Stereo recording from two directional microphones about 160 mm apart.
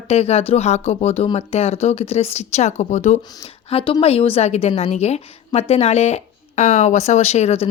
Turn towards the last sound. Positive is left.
turn(degrees=40)  # may be behind; listen again after turning